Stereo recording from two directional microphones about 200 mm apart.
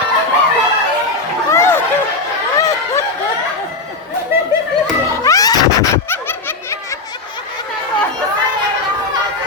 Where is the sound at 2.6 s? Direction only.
15° left (ahead or behind).